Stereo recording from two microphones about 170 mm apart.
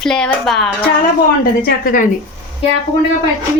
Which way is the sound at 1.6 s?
55° left (ahead or behind).